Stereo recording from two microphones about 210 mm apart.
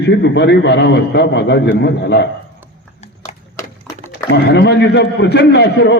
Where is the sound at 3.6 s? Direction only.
15° left (ahead or behind).